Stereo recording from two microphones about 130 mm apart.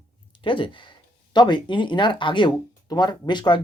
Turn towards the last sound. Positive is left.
turn(degrees=35)  # may be behind; listen again after turning